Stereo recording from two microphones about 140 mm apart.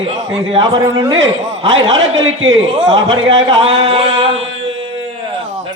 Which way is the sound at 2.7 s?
35° right (ahead or behind).